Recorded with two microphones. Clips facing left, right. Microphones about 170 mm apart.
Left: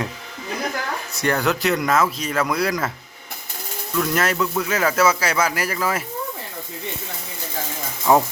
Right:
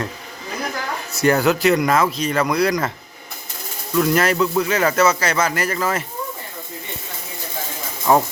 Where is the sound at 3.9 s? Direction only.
Centre (ahead or behind).